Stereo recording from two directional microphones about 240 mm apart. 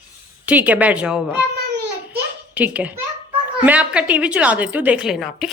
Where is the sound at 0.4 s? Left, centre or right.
Centre.